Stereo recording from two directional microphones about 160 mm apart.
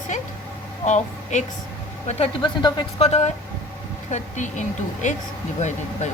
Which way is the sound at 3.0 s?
45° left (ahead or behind).